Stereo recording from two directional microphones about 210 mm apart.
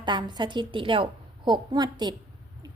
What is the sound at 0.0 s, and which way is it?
A woman's voice, 20° right (ahead or behind).